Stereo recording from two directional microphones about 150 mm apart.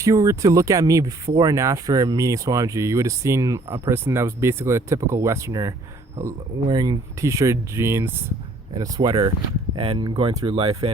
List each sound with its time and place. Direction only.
0.0 s speech: 20° right (ahead or behind); by 10.8 s 40° right (ahead or behind)